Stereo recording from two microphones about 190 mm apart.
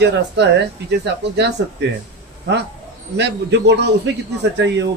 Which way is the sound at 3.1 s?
65° right (ahead or behind).